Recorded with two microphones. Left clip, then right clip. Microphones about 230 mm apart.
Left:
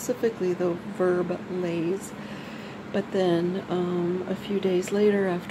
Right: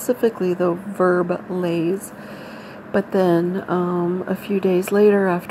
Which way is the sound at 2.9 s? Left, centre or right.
Right.